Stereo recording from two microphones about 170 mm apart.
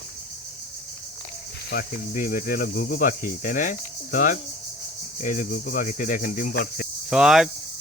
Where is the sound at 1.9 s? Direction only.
55° left (ahead or behind).